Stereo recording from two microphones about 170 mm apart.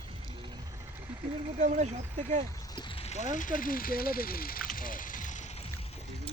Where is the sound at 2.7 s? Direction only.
35° left (ahead or behind); by 5.4 s 50° left (ahead or behind).